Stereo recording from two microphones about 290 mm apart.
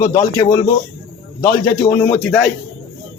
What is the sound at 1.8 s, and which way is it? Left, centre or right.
Speech, centre.